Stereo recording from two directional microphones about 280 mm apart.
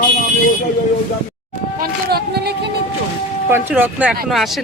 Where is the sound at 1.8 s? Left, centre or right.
Right.